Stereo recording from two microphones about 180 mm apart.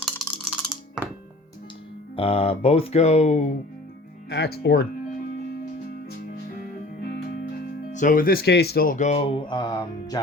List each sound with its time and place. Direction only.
0.0 s music: centre (ahead or behind)
2.1 s speech: 30° left (ahead or behind)
4.3 s speech: 65° left (ahead or behind)
7.9 s speech: 50° left (ahead or behind); by 10.2 s 25° left (ahead or behind)